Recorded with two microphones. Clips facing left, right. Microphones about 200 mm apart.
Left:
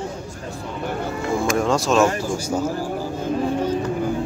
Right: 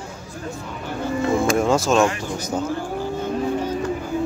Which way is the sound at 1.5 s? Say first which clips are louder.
Right 1 dB; centre (ahead or behind).